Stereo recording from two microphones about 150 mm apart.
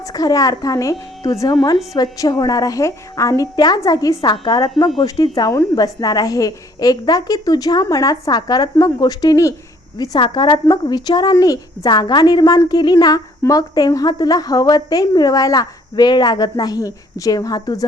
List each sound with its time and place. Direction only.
0.0 s a woman's voice: 25° left (ahead or behind)